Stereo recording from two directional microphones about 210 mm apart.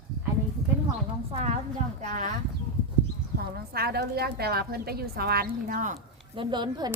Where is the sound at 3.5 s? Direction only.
50° right (ahead or behind).